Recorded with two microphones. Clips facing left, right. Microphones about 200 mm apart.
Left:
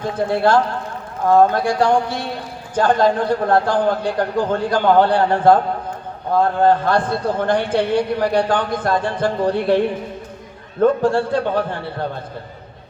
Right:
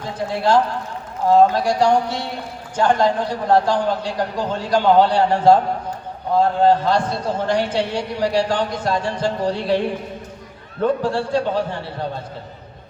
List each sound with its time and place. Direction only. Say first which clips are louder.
0.3 s a man's voice: left 1 dB; 60° left (ahead or behind)
11.0 s a man's voice: left 3 dB; 50° left (ahead or behind)